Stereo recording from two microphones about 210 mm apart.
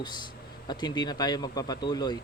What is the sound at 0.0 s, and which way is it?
Speech, 20° left (ahead or behind).